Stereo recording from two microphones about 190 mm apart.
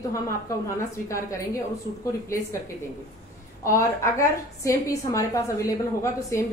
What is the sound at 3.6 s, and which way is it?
A woman's voice, 15° left (ahead or behind).